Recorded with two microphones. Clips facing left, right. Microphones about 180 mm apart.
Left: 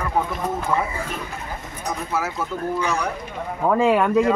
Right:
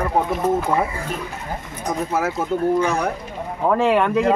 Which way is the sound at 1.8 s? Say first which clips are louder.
Right 4 dB; 50° right (ahead or behind).